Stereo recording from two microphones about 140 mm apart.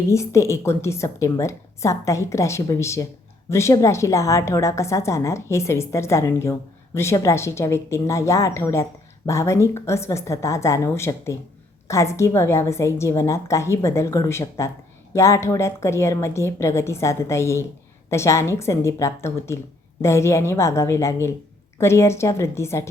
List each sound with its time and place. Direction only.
0.1 s a woman's voice: 20° left (ahead or behind)